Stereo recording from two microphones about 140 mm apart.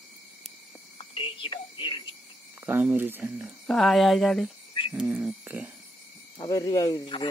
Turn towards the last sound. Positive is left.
turn(degrees=25)  # may be behind; listen again after turning